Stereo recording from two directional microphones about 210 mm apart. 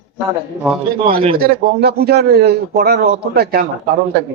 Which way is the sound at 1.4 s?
45° right (ahead or behind).